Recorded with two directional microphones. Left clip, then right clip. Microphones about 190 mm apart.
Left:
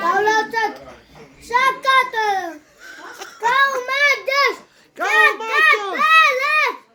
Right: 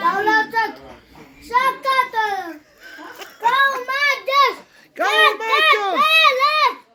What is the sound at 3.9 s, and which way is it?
Child singing, centre (ahead or behind).